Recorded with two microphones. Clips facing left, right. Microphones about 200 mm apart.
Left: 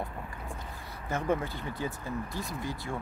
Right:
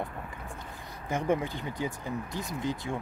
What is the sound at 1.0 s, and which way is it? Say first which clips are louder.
Speech: right 2 dB; 15° right (ahead or behind).